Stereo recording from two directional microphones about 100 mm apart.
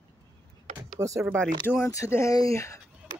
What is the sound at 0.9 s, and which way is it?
Speech, 30° right (ahead or behind).